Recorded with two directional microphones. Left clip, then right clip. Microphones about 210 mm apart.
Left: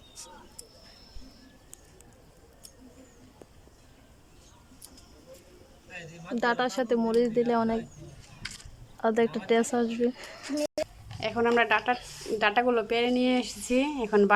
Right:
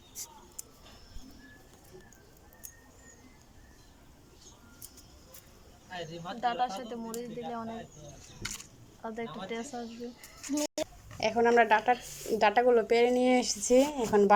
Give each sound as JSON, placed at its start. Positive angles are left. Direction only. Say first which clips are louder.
{"t": 6.4, "sound": "speech", "louder": "left 4 dB", "side_deg": 50}
{"t": 8.4, "sound": "a sound", "louder": "even", "side_deg": -15}
{"t": 9.0, "sound": "speech", "louder": "left 13 dB", "side_deg": 50}
{"t": 11.2, "sound": "speech", "louder": "right 1 dB", "side_deg": 0}